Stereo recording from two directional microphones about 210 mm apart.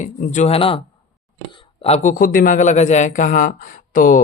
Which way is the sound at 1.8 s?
35° left (ahead or behind).